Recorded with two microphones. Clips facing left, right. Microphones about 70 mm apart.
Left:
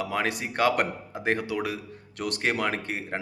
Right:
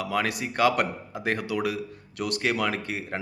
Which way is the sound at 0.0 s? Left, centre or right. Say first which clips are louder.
Right 1 dB; left.